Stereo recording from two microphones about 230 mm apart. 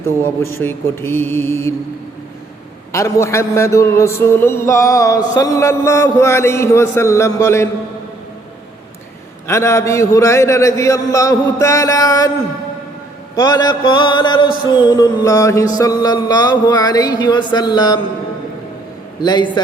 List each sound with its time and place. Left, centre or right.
0.6 s a man's voice: centre
2.9 s a man's voice: centre
9.5 s a man's voice: centre
13.3 s mantra: centre
14.7 s a man's voice: centre
19.2 s mantra: centre